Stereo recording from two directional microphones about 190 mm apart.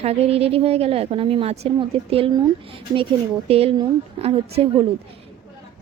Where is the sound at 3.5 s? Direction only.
30° right (ahead or behind).